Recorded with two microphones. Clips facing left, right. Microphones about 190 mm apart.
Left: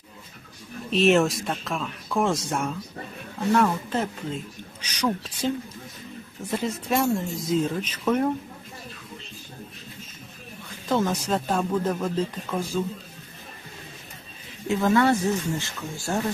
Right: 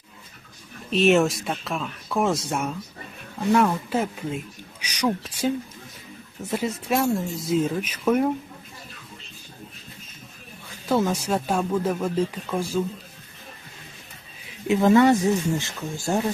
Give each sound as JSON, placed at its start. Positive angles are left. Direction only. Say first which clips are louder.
{"t": 0.9, "sound": "speech", "louder": "right 1 dB", "side_deg": 0}
{"t": 10.8, "sound": "speech", "louder": "right 2 dB", "side_deg": -10}
{"t": 14.7, "sound": "speech", "louder": "right 4 dB", "side_deg": -20}